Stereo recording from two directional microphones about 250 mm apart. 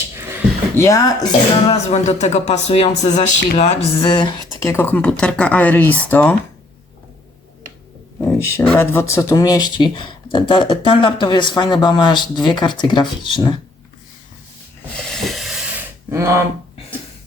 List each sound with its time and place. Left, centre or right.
0.2 s a sound: centre
0.8 s speech: centre
1.7 s speech: left; by 6.3 s centre
8.2 s speech: centre
15.1 s hiss: centre